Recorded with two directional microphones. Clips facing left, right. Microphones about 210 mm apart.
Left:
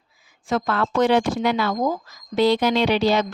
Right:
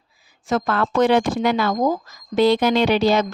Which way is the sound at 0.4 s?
45° right (ahead or behind).